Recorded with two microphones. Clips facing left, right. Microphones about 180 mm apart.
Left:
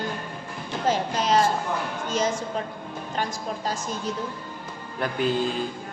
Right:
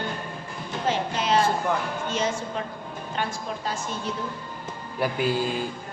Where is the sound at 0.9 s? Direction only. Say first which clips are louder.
Left 1 dB; 40° left (ahead or behind).